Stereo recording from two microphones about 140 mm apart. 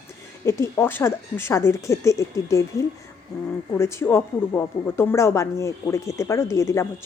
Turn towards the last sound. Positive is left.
turn(degrees=20)  # may be behind; listen again after turning